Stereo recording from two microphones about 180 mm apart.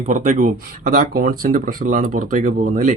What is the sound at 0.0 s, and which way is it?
Speech, 45° right (ahead or behind).